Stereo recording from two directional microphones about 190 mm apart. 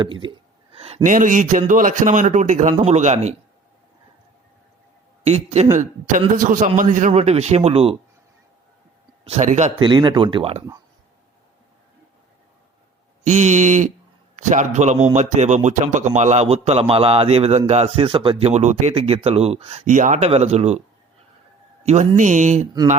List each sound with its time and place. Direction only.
0.0 s speech: 25° right (ahead or behind)
0.7 s a sound: 30° right (ahead or behind)
1.0 s a man's voice: 45° right (ahead or behind)
5.2 s speech: 35° right (ahead or behind)
9.2 s speech: 35° right (ahead or behind)
9.7 s speech: 25° right (ahead or behind)
13.2 s speech: 40° right (ahead or behind)
21.8 s speech: 40° right (ahead or behind)